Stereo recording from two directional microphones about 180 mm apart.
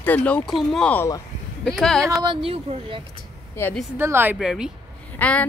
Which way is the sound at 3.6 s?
10° left (ahead or behind).